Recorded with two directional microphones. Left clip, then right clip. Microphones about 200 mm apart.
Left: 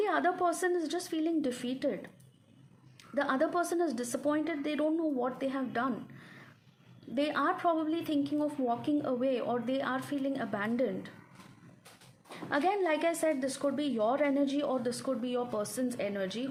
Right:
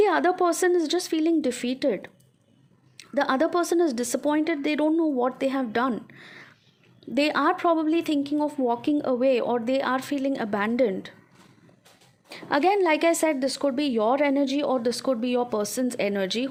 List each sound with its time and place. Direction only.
0.0 s a woman's voice: 45° right (ahead or behind)
12.5 s a woman's voice: 40° right (ahead or behind)